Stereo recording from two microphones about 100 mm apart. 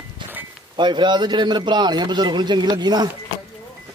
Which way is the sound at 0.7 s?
50° right (ahead or behind).